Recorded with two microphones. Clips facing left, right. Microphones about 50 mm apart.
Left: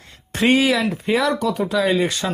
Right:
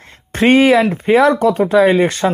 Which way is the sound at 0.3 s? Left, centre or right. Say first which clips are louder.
Right 7 dB; right.